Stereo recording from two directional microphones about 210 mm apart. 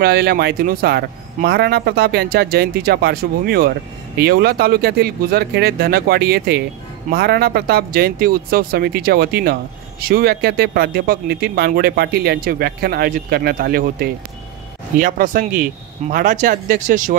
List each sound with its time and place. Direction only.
0.0 s speech: 50° right (ahead or behind)